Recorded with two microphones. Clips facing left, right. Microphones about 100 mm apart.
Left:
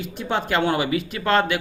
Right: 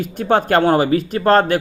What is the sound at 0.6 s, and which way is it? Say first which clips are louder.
A man's voice: right 7 dB; 40° right (ahead or behind).